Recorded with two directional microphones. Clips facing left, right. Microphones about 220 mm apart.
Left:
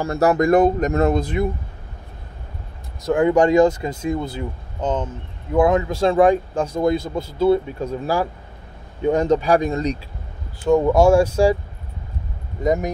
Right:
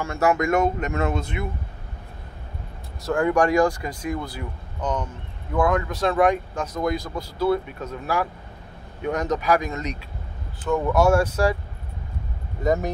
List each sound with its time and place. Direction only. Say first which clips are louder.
0.0 s speech: left 4 dB; 35° left (ahead or behind)
3.1 s speech: left 5 dB; 20° left (ahead or behind)
12.6 s speech: left 2 dB; 15° left (ahead or behind)